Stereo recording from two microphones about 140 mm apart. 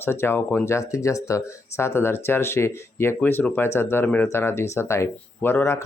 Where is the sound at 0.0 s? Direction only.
15° left (ahead or behind).